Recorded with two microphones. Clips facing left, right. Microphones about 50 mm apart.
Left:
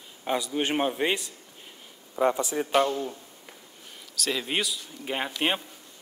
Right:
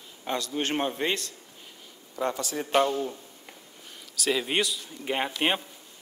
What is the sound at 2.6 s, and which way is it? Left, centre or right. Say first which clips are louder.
A man's voice: right 2 dB; centre.